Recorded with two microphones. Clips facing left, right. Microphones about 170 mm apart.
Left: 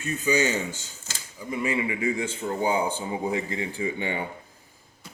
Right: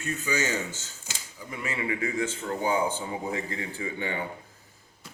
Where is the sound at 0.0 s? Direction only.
15° left (ahead or behind).